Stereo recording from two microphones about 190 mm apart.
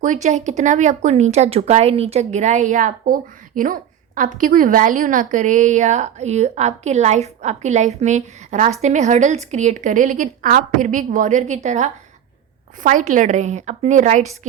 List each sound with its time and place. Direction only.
0.0 s speech: 40° right (ahead or behind)